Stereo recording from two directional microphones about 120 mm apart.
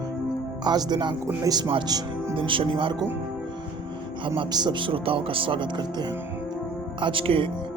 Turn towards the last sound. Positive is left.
turn(degrees=-45)  # may be behind; listen again after turning